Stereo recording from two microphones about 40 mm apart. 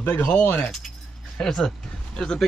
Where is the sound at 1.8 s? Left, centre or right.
Left.